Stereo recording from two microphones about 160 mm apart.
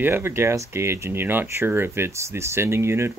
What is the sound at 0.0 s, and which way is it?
Speech, 15° right (ahead or behind).